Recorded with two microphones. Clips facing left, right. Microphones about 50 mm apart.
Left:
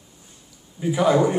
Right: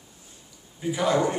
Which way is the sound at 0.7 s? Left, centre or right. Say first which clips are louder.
Left 5 dB; centre.